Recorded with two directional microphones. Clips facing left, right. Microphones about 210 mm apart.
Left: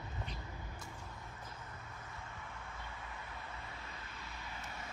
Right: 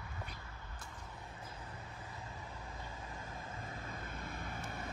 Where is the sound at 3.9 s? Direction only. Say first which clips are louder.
Right 5 dB; 55° right (ahead or behind).